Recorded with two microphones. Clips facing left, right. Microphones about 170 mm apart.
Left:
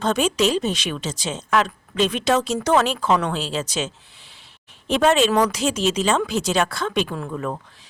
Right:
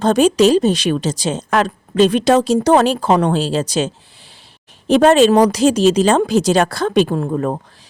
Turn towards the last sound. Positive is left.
turn(degrees=-40)  # may be behind; listen again after turning